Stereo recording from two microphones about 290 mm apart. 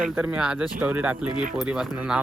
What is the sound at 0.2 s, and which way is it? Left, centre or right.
Speech, centre.